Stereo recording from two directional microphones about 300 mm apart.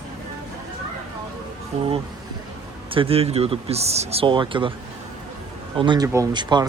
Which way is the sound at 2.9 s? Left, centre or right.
Centre.